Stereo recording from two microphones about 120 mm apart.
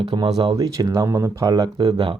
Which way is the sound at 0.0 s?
35° right (ahead or behind).